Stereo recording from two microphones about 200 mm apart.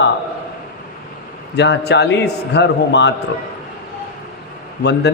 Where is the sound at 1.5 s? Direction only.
60° left (ahead or behind).